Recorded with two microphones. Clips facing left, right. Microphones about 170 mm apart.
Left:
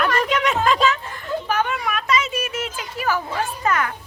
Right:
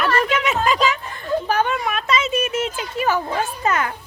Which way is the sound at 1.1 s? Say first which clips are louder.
Right 3 dB; 30° right (ahead or behind).